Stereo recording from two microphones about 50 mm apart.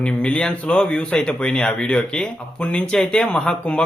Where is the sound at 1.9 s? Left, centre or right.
Left.